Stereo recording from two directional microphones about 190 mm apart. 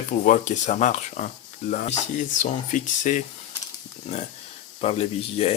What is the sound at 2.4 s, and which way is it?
Speech, 40° left (ahead or behind).